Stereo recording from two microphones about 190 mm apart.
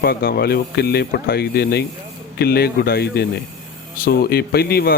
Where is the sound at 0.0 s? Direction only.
55° left (ahead or behind).